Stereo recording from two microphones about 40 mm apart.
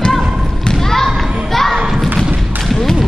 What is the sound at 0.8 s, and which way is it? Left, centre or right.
Thump, centre.